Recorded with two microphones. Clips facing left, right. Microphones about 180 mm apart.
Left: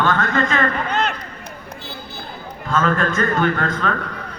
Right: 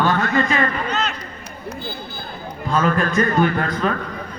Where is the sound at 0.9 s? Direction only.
55° left (ahead or behind).